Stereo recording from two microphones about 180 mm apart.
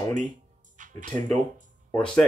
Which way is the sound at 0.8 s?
45° right (ahead or behind).